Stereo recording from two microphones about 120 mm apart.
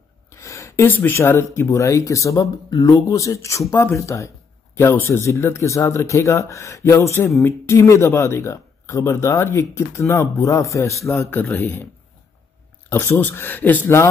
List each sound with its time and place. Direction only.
0.3 s speech: 25° left (ahead or behind)
12.9 s speech: 15° left (ahead or behind)